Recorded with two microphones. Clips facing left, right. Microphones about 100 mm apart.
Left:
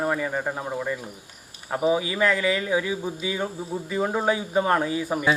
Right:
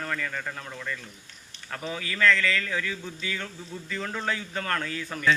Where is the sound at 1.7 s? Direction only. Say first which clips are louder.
Left 11 dB; 15° left (ahead or behind).